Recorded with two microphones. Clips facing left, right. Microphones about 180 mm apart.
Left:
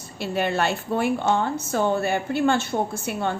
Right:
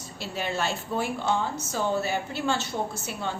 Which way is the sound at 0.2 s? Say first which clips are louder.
Left 6 dB; 60° left (ahead or behind).